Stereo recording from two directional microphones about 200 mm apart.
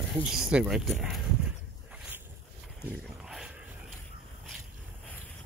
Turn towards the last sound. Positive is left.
turn(degrees=0)  # may be behind; listen again after turning